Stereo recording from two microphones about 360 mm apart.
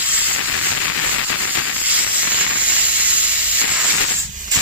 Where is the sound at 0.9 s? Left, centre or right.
Left.